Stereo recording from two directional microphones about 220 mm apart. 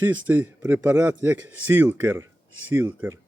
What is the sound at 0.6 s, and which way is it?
Speech, 10° right (ahead or behind).